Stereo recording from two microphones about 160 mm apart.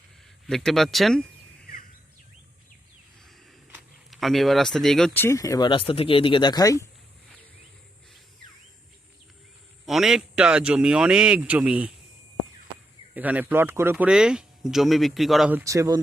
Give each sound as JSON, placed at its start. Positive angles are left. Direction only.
{"t": 0.4, "sound": "speech", "side_deg": 0}
{"t": 4.1, "sound": "speech", "side_deg": 0}
{"t": 5.2, "sound": "speech", "side_deg": 20}
{"t": 9.8, "sound": "speech", "side_deg": 0}
{"t": 13.1, "sound": "speech", "side_deg": -10}
{"t": 15.5, "sound": "speech", "side_deg": -20}